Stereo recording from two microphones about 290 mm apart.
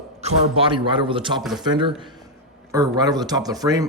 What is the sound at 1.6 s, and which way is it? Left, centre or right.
A man's voice, centre.